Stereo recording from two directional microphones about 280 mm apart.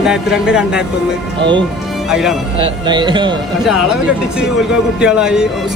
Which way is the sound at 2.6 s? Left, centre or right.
Centre.